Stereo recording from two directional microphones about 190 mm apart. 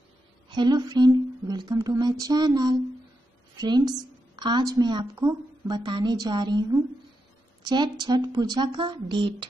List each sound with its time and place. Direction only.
0.5 s a woman's voice: 20° right (ahead or behind)